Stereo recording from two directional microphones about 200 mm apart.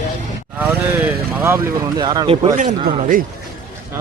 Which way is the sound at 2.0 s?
20° right (ahead or behind).